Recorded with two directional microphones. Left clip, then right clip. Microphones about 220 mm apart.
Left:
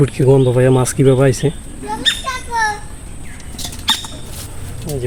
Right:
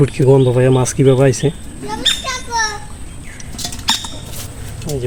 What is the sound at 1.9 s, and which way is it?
Children playing, 40° right (ahead or behind).